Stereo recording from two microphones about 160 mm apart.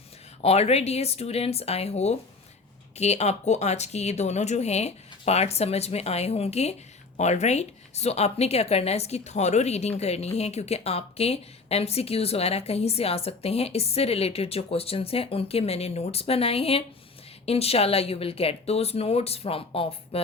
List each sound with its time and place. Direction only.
0.4 s a woman's voice: 40° left (ahead or behind)